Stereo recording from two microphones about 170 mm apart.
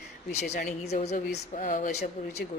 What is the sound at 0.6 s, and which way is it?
Speech, 45° left (ahead or behind).